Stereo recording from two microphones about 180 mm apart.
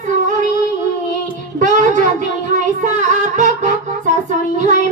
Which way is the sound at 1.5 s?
45° right (ahead or behind).